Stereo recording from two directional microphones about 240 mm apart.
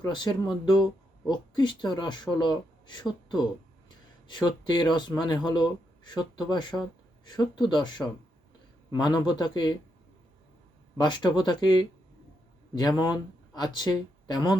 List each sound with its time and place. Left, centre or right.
0.0 s speech: centre
11.0 s speech: centre
13.0 s speech: centre